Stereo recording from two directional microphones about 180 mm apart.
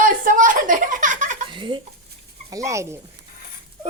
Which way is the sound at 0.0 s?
50° right (ahead or behind).